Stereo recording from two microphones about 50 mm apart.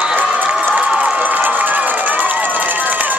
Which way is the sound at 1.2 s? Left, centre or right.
Right.